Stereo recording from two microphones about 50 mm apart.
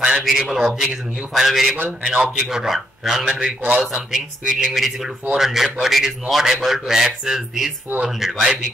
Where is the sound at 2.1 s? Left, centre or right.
Right.